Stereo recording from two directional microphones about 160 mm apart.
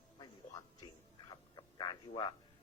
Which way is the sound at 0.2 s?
25° left (ahead or behind).